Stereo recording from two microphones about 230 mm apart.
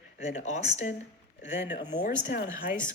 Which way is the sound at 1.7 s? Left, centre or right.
Centre.